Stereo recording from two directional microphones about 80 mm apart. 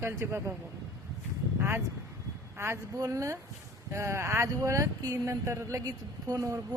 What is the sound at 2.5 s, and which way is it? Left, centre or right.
A woman's voice, right.